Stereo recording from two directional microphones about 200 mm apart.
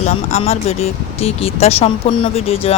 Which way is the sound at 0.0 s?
35° left (ahead or behind).